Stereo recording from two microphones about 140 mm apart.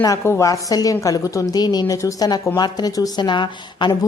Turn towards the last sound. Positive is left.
turn(degrees=35)  # may be behind; listen again after turning